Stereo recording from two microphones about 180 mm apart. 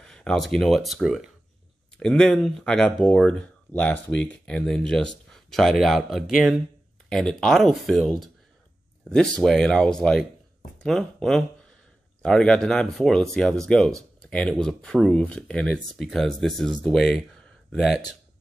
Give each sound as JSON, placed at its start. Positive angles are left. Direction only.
{"t": 0.0, "sound": "speech", "side_deg": 5}